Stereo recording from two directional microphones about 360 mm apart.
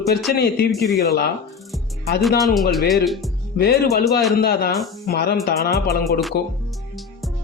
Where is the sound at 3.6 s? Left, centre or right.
Left.